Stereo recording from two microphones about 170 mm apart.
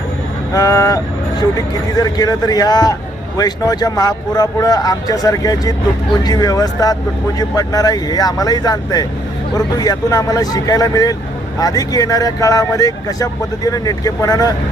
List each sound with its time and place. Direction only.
0.5 s speech: 20° left (ahead or behind)